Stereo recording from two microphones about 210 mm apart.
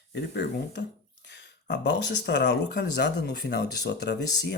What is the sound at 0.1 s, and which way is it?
Speech, 55° left (ahead or behind).